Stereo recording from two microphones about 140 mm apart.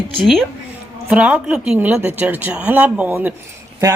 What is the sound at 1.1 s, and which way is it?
Speech, 10° right (ahead or behind).